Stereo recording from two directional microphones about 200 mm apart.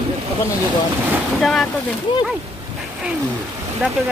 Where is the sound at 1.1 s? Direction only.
Centre (ahead or behind).